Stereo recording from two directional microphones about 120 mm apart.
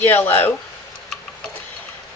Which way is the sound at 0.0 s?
15° left (ahead or behind).